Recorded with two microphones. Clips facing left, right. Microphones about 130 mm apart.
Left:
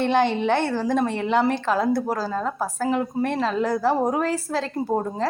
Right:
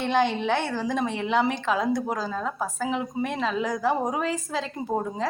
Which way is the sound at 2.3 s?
Centre (ahead or behind).